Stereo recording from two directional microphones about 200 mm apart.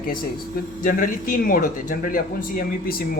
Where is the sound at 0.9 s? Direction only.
45° left (ahead or behind).